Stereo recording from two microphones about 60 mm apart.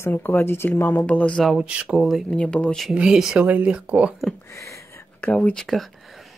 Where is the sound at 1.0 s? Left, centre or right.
Left.